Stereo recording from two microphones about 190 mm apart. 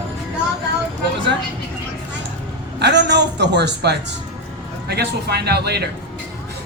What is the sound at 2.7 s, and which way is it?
A woman's voice, 65° right (ahead or behind).